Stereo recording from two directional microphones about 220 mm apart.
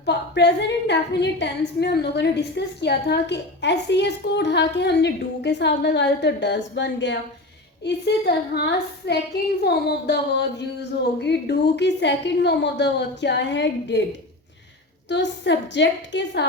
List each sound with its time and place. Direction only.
0.0 s a woman's voice: 50° left (ahead or behind)
11.2 s a woman's voice: 50° left (ahead or behind)
15.1 s a woman's voice: 50° left (ahead or behind)